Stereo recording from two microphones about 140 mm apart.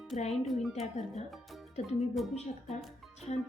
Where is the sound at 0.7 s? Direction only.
55° left (ahead or behind).